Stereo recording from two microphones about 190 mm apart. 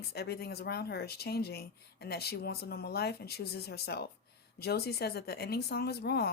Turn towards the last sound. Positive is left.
turn(degrees=55)  # may be behind; listen again after turning